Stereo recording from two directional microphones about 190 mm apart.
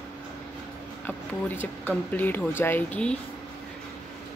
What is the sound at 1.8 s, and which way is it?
Speech, 10° left (ahead or behind).